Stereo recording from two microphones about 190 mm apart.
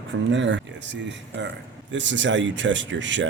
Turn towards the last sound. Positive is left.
turn(degrees=-75)  # may be behind; listen again after turning